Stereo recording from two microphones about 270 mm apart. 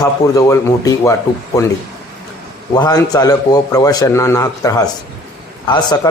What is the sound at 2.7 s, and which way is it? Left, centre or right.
A man's voice, centre.